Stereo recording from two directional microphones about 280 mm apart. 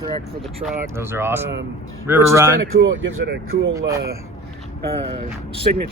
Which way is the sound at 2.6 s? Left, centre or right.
Right.